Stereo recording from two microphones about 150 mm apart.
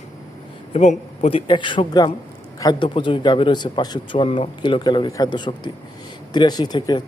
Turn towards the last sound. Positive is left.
turn(degrees=30)  # may be behind; listen again after turning